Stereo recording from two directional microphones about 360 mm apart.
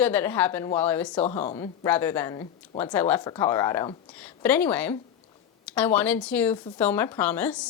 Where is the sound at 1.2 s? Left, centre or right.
Centre.